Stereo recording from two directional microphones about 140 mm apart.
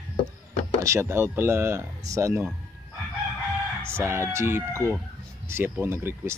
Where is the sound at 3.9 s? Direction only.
15° right (ahead or behind).